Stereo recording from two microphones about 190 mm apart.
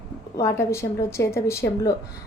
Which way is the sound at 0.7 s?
15° left (ahead or behind).